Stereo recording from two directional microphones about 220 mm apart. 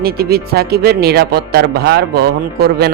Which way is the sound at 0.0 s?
45° right (ahead or behind).